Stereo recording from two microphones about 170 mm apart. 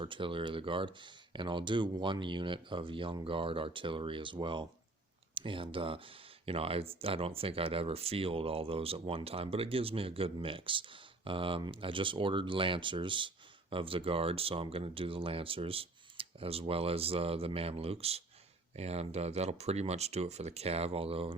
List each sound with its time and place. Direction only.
0.0 s speech: 30° right (ahead or behind)